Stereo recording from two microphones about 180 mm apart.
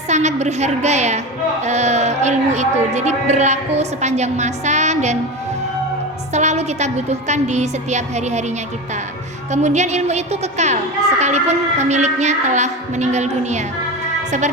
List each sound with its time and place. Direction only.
0.1 s speech: 40° right (ahead or behind)
6.3 s speech: 40° right (ahead or behind)
14.3 s music: 40° right (ahead or behind)